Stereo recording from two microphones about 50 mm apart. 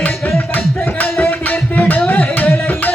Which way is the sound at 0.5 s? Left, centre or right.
Left.